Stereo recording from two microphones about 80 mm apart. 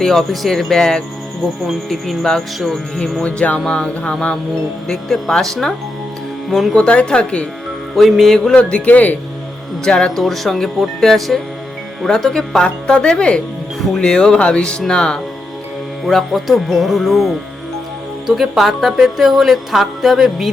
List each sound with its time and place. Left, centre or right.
0.0 s speech: centre
3.2 s speech: centre
6.7 s speech: centre
7.9 s speech: centre
8.5 s speech: centre
9.8 s speech: centre